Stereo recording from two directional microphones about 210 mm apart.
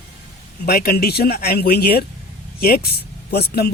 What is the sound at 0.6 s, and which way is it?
Speech, 45° left (ahead or behind).